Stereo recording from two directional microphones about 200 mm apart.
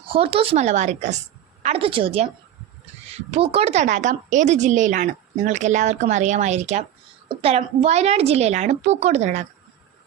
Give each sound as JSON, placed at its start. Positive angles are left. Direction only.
{"t": 0.1, "sound": "a woman's voice", "side_deg": -25}